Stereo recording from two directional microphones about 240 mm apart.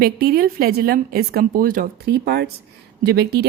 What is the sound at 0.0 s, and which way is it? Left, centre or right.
Speech, right.